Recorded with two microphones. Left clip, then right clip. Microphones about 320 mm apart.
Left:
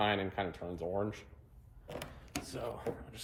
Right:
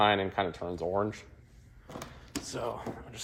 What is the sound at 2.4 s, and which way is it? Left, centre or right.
Speech, centre.